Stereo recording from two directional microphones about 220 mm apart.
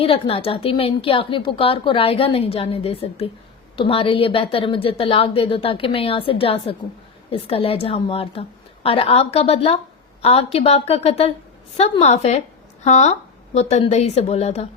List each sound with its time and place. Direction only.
0.0 s a woman's voice: 25° left (ahead or behind)